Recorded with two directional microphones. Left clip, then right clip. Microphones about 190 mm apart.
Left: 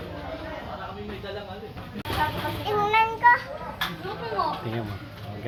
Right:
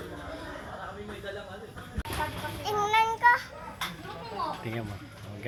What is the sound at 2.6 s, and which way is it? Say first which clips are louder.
Child singing: left 3 dB; 45° right (ahead or behind).